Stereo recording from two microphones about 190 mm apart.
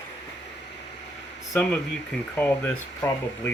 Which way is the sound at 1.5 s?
5° left (ahead or behind).